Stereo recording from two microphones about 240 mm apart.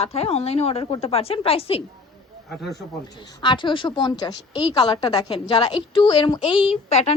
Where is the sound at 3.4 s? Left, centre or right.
Centre.